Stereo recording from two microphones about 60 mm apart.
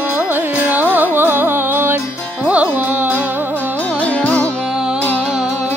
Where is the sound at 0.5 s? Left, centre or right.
Right.